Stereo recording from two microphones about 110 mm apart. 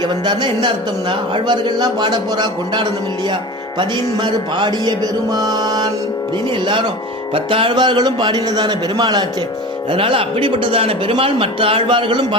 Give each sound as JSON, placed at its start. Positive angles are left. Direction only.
{"t": 0.3, "sound": "a man's voice", "side_deg": -40}
{"t": 1.5, "sound": "music", "side_deg": -40}
{"t": 7.3, "sound": "a man's voice", "side_deg": -55}
{"t": 9.9, "sound": "a man's voice", "side_deg": -55}